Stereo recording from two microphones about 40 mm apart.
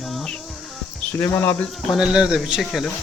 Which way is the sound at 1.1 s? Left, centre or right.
Left.